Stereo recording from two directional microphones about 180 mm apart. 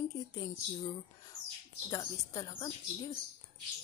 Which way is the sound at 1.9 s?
20° left (ahead or behind).